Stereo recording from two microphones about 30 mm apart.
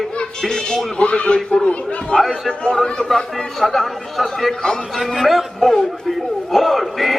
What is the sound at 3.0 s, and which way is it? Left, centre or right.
A man's voice, centre.